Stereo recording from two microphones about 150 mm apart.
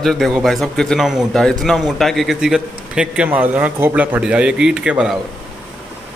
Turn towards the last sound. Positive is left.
turn(degrees=-5)  # may be behind; listen again after turning